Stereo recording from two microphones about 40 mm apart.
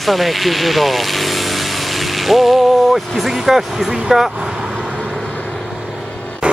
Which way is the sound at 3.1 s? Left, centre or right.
Centre.